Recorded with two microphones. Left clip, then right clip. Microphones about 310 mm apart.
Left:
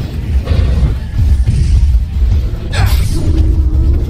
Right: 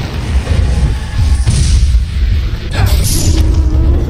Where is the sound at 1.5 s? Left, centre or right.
Centre.